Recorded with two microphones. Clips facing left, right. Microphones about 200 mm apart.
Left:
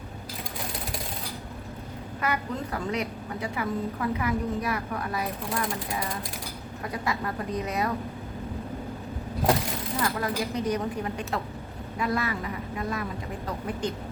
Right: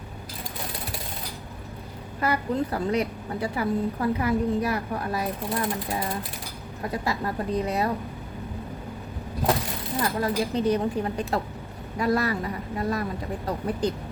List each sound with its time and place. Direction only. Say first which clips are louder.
2.2 s a woman's voice: right 5 dB; 35° right (ahead or behind)
6.9 s a woman's voice: right 2 dB; 30° right (ahead or behind)
10.2 s a woman's voice: right 4 dB; 30° right (ahead or behind)